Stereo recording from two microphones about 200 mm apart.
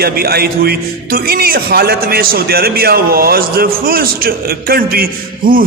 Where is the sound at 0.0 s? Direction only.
50° right (ahead or behind).